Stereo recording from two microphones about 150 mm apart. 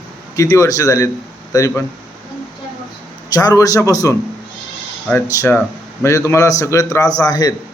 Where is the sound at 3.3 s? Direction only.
25° left (ahead or behind).